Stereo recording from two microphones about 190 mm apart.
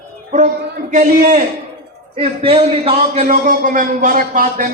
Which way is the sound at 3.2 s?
45° right (ahead or behind).